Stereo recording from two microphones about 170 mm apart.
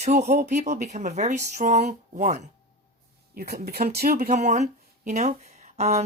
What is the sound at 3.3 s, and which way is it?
Speech, 60° right (ahead or behind).